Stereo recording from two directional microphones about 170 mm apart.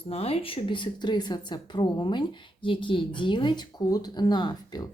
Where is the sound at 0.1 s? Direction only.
35° left (ahead or behind).